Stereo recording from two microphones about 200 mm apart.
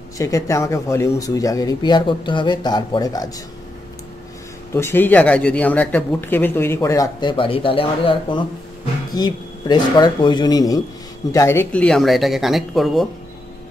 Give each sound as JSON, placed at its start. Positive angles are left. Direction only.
{"t": 0.2, "sound": "speech", "side_deg": 15}
{"t": 4.7, "sound": "speech", "side_deg": 10}